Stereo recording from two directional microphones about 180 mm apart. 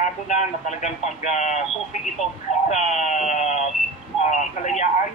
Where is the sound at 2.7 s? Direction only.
40° left (ahead or behind).